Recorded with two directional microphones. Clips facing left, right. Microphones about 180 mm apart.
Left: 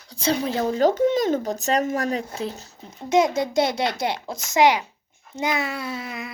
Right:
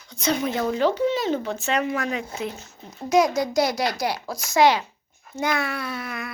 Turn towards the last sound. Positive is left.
turn(degrees=20)  # may be behind; listen again after turning